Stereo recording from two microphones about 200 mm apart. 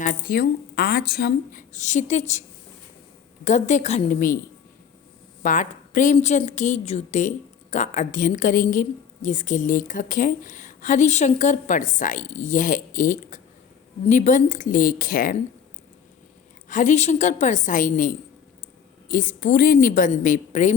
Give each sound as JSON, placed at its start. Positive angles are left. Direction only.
{"t": 0.0, "sound": "a woman's voice", "side_deg": 45}
{"t": 1.8, "sound": "a woman's voice", "side_deg": 35}
{"t": 3.4, "sound": "a woman's voice", "side_deg": 35}
{"t": 5.4, "sound": "a woman's voice", "side_deg": 40}
{"t": 16.6, "sound": "a woman's voice", "side_deg": 40}